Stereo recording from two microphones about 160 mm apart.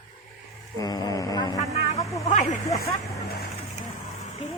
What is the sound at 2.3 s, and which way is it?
Speech, 50° left (ahead or behind).